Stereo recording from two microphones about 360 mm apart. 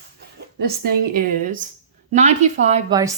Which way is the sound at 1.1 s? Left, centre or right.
Right.